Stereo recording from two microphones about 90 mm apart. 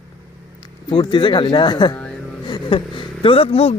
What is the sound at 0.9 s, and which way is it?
Speech, 55° left (ahead or behind).